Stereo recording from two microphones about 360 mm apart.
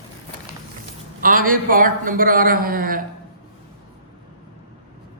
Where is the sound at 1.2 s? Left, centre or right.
Right.